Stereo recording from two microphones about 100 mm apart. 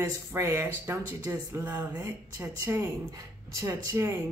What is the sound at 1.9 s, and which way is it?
Speech, 40° right (ahead or behind).